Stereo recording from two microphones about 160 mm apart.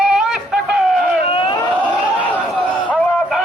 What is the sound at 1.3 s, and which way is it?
Vehicle, 30° left (ahead or behind).